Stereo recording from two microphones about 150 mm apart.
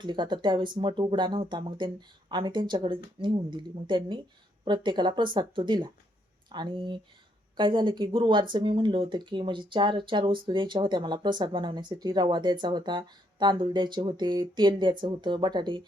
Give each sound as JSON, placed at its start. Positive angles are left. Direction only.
{"t": 0.0, "sound": "speech", "side_deg": -30}